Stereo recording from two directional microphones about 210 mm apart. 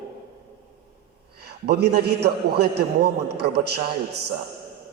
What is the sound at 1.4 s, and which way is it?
A man's voice, 50° right (ahead or behind).